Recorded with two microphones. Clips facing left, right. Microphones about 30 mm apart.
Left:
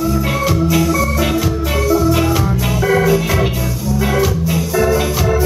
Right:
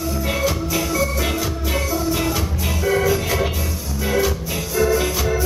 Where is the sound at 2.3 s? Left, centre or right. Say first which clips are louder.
Left 7 dB; left.